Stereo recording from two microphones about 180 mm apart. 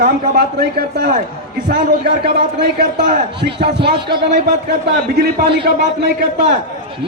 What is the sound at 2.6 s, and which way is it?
A man's voice, 60° right (ahead or behind).